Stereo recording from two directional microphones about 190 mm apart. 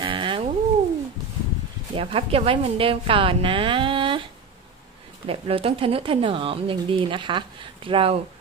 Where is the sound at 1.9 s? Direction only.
30° right (ahead or behind).